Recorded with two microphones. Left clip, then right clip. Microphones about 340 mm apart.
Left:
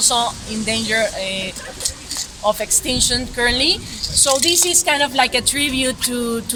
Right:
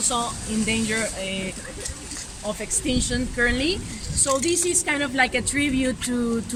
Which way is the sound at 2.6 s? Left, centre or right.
Left.